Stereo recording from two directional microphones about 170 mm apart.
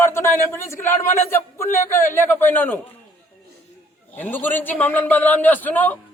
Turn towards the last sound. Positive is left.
turn(degrees=10)  # may be behind; listen again after turning